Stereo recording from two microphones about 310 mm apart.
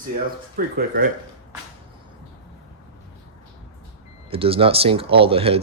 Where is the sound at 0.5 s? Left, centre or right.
Right.